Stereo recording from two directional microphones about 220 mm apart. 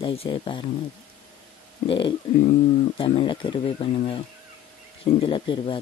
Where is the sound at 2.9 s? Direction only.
20° left (ahead or behind).